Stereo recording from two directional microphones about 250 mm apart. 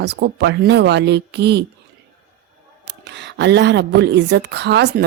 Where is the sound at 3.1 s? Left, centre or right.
Right.